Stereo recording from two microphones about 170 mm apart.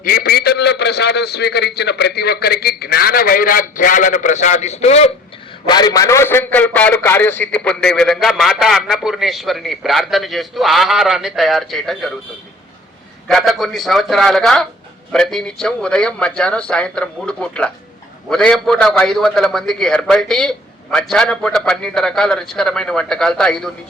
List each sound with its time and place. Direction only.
0.0 s a man's voice: 60° left (ahead or behind); by 5.1 s 40° left (ahead or behind)
5.6 s a man's voice: 25° left (ahead or behind); by 12.1 s centre (ahead or behind)
13.2 s a man's voice: centre (ahead or behind)